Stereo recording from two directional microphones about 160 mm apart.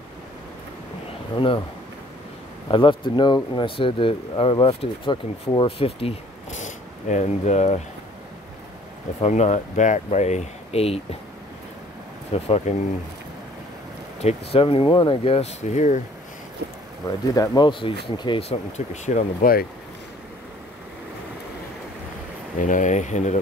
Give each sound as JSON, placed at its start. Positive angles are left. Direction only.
{"t": 1.3, "sound": "speech", "side_deg": 30}
{"t": 2.7, "sound": "speech", "side_deg": 30}
{"t": 9.2, "sound": "speech", "side_deg": 45}
{"t": 12.4, "sound": "speech", "side_deg": 45}
{"t": 14.2, "sound": "speech", "side_deg": 35}
{"t": 17.3, "sound": "speech", "side_deg": 25}
{"t": 19.0, "sound": "speech", "side_deg": 55}
{"t": 22.6, "sound": "speech", "side_deg": 55}